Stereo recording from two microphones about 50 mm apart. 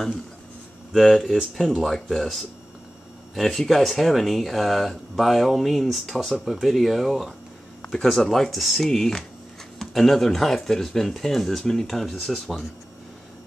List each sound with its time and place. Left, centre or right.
0.9 s speech: centre
7.8 s a sound: centre
8.1 s speech: centre